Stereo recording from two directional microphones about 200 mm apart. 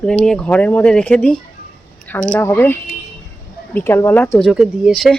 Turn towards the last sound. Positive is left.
turn(degrees=0)  # may be behind; listen again after turning